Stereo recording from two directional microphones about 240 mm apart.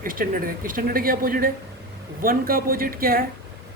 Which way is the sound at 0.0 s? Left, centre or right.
Right.